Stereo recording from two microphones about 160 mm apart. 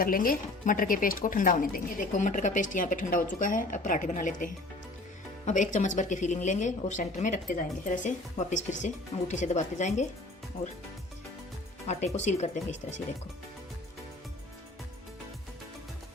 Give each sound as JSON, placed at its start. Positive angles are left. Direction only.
{"t": 0.0, "sound": "a woman's voice", "side_deg": 60}
{"t": 11.9, "sound": "speech", "side_deg": 45}